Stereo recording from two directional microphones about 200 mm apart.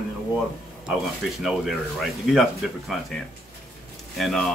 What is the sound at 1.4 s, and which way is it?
Speech, centre (ahead or behind).